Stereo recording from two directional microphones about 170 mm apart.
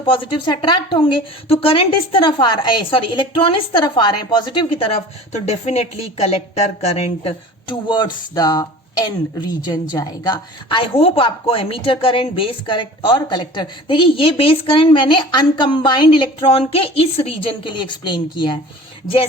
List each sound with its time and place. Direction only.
0.0 s a woman's voice: 30° left (ahead or behind)